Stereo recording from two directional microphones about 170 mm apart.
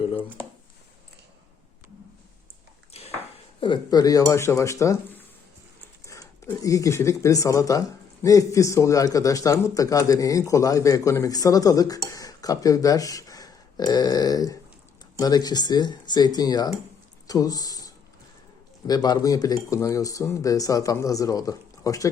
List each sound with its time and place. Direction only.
3.6 s speech: 25° left (ahead or behind)